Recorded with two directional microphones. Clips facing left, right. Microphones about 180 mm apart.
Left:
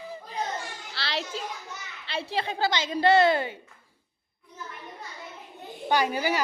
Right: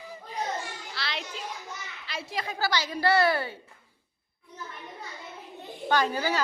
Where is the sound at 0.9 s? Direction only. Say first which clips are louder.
Left 4 dB; 30° left (ahead or behind).